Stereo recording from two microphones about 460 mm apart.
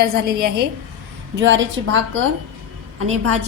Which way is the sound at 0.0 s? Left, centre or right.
Centre.